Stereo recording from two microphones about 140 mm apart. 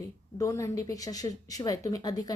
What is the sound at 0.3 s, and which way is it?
A woman's voice, 20° left (ahead or behind).